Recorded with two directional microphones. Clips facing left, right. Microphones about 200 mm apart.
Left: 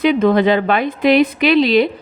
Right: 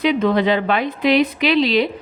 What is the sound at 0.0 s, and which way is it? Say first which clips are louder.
A woman's voice: left 4 dB; 50° left (ahead or behind).